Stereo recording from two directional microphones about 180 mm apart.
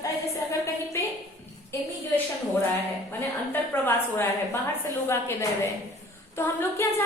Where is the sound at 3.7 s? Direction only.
10° left (ahead or behind).